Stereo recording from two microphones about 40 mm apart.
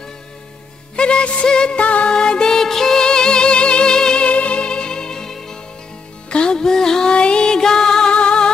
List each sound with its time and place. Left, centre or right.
0.9 s music: left
1.8 s music: left
2.1 s music: centre
2.5 s music: centre
4.3 s music: left; by 7.1 s centre
7.1 s music: left
8.1 s music: left